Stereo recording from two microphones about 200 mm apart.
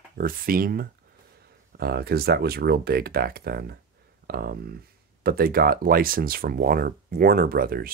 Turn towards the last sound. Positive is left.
turn(degrees=-45)  # may be behind; listen again after turning